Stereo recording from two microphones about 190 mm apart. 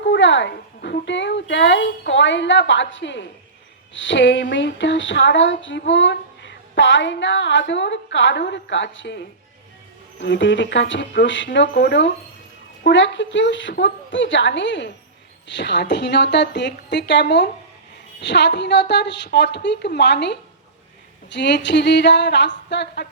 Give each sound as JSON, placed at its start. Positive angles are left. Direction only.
{"t": 0.0, "sound": "a woman's voice", "side_deg": 70}